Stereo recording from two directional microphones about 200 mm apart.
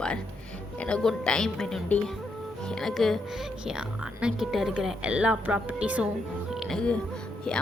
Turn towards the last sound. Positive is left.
turn(degrees=5)  # may be behind; listen again after turning